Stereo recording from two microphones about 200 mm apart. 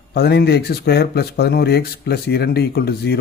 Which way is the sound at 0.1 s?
55° left (ahead or behind).